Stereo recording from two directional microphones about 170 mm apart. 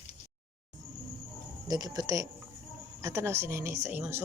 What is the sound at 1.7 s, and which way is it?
Speech, 25° right (ahead or behind).